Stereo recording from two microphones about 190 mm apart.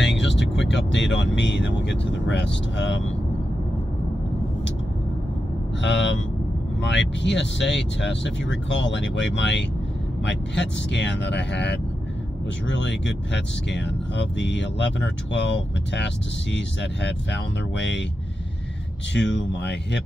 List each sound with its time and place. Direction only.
0.0 s speech: 70° left (ahead or behind)
5.8 s speech: 70° left (ahead or behind)
19.1 s speech: 70° left (ahead or behind)